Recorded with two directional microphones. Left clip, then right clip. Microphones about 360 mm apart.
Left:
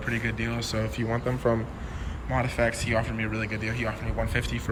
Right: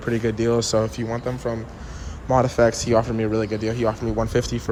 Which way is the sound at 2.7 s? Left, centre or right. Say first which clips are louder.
Right 8 dB; centre.